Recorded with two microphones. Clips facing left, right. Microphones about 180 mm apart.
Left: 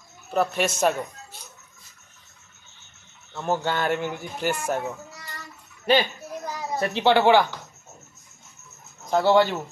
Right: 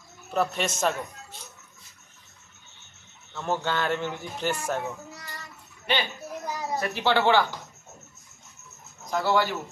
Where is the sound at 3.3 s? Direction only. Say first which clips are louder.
Left 3 dB; 10° left (ahead or behind).